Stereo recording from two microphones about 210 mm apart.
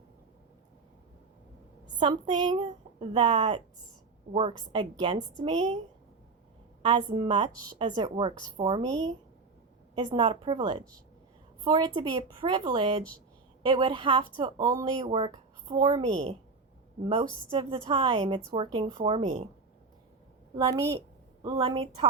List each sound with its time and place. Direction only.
2.0 s a woman's voice: 20° right (ahead or behind)
6.8 s a woman's voice: 25° right (ahead or behind)
17.5 s a woman's voice: 25° right (ahead or behind)
20.6 s a woman's voice: 15° right (ahead or behind)